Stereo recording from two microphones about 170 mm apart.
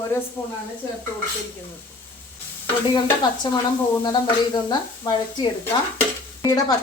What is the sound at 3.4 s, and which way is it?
Speech, 25° left (ahead or behind).